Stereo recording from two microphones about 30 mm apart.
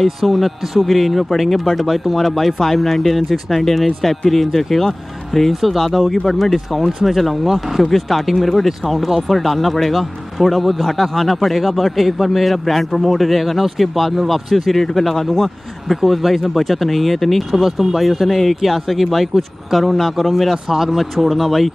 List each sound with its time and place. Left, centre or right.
0.0 s speech: centre
5.5 s speech: centre
7.8 s speech: centre
16.0 s speech: centre